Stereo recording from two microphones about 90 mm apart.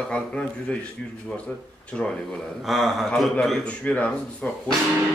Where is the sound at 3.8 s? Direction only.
15° left (ahead or behind).